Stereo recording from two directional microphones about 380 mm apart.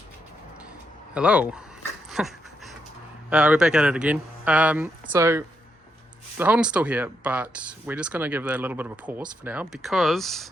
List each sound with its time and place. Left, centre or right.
1.1 s speech: centre
2.0 s dog: centre
3.2 s speech: centre